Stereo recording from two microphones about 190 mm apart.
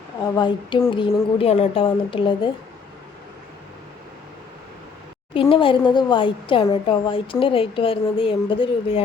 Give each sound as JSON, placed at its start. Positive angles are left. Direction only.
{"t": 0.3, "sound": "a woman's voice", "side_deg": 20}
{"t": 5.3, "sound": "a woman's voice", "side_deg": 25}